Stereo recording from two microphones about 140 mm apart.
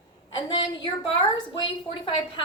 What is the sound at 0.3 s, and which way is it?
A woman's voice, 30° left (ahead or behind).